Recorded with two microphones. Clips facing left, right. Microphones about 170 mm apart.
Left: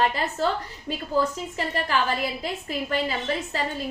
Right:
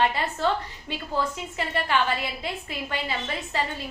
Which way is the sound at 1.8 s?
35° left (ahead or behind).